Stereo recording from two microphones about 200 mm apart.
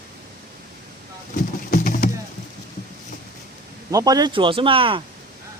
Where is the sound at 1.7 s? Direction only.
45° left (ahead or behind).